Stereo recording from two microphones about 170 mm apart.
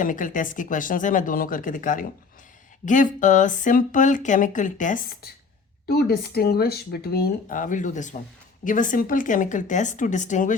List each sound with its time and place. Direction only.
0.0 s speech: 50° left (ahead or behind)